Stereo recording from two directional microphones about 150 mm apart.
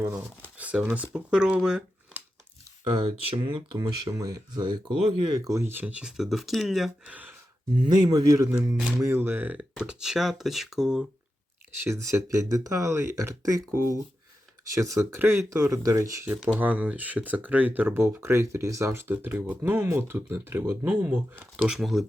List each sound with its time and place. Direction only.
0.0 s speech: 15° right (ahead or behind)
3.0 s speech: 35° right (ahead or behind); by 7.3 s 10° right (ahead or behind)
8.0 s speech: 25° right (ahead or behind); by 11.0 s 5° right (ahead or behind)
11.8 s speech: 15° right (ahead or behind)